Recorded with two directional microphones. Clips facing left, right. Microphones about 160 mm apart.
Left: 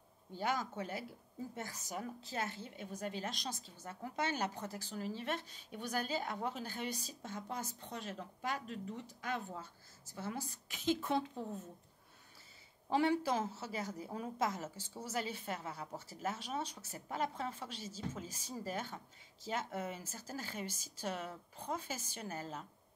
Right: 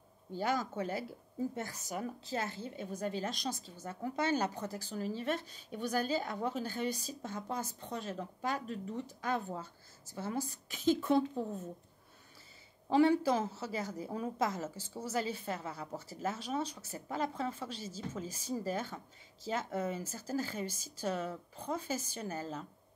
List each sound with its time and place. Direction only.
0.4 s a woman's voice: 40° right (ahead or behind)
2.0 s a woman's voice: 30° right (ahead or behind)
12.9 s a woman's voice: 35° right (ahead or behind)